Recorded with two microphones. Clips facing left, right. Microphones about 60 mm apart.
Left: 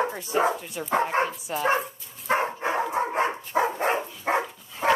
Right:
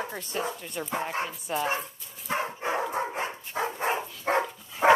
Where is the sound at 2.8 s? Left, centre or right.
Centre.